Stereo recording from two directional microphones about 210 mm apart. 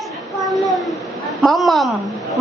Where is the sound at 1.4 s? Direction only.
Centre (ahead or behind).